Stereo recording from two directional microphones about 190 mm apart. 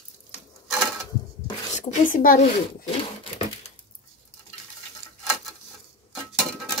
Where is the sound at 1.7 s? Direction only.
40° left (ahead or behind).